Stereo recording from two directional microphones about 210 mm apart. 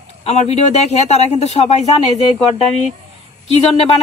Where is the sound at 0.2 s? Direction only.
30° left (ahead or behind).